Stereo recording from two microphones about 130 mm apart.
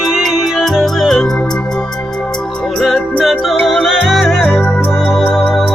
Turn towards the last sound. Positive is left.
turn(degrees=0)  # may be behind; listen again after turning